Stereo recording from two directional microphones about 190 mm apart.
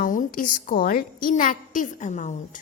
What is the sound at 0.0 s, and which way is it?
A woman's voice, 45° left (ahead or behind).